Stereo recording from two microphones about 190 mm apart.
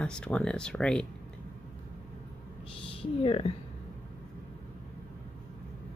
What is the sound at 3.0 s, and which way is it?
Speech, 30° left (ahead or behind).